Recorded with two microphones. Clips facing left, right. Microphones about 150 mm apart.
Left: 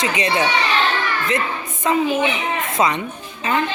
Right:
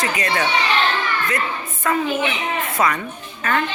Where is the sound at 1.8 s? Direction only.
20° left (ahead or behind).